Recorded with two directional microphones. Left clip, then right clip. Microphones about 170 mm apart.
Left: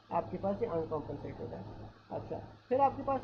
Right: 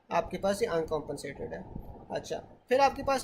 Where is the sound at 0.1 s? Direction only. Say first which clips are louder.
Right 5 dB; 30° right (ahead or behind).